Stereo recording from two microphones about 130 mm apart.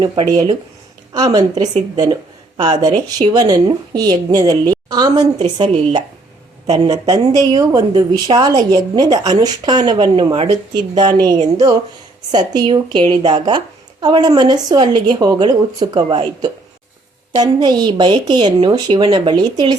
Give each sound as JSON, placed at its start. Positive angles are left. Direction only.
{"t": 1.1, "sound": "a woman's voice", "side_deg": -30}